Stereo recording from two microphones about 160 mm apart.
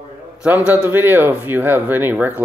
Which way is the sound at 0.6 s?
10° right (ahead or behind).